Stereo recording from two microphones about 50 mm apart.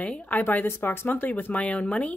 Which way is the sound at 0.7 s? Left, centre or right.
Left.